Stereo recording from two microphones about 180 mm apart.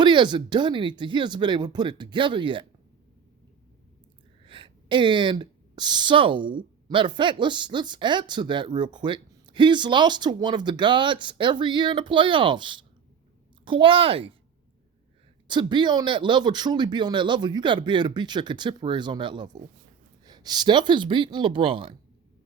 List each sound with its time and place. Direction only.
0.0 s speech: 25° right (ahead or behind)
4.4 s a woman's voice: 25° right (ahead or behind)
15.4 s speech: 25° right (ahead or behind)